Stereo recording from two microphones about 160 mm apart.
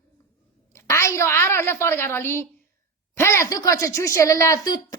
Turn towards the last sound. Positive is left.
turn(degrees=25)  # may be behind; listen again after turning